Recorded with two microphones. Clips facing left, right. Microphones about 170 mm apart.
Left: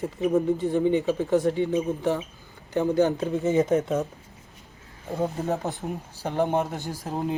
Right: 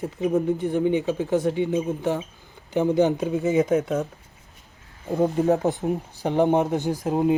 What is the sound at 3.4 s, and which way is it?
Speech, centre (ahead or behind).